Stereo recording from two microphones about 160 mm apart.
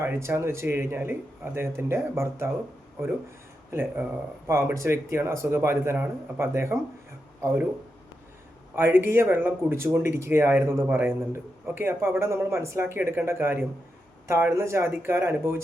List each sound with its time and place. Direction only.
0.0 s speech: 15° right (ahead or behind)
3.7 s speech: 15° right (ahead or behind)
8.7 s speech: 15° right (ahead or behind)